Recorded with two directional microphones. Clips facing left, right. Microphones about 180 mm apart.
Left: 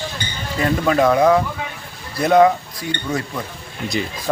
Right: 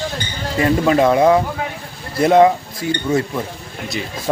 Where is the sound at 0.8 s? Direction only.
25° right (ahead or behind).